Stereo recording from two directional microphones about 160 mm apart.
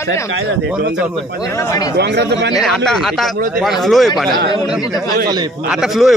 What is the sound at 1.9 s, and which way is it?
Speech, 90° right.